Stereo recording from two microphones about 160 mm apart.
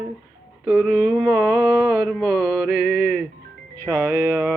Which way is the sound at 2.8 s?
70° left (ahead or behind).